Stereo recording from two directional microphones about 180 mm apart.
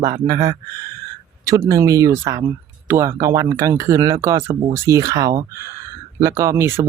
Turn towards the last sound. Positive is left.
turn(degrees=-15)  # may be behind; listen again after turning